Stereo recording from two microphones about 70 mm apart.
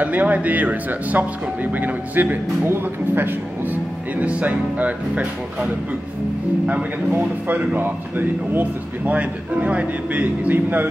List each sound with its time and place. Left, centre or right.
0.0 s speech: right